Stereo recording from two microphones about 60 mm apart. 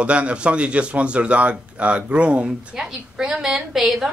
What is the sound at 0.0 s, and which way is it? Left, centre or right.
A man's voice, centre.